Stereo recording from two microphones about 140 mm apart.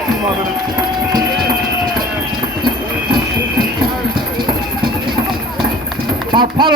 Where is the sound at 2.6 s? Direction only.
35° right (ahead or behind).